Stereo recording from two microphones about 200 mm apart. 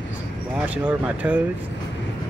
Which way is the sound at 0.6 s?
5° right (ahead or behind).